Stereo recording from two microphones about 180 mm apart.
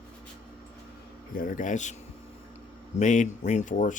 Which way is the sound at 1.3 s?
50° left (ahead or behind).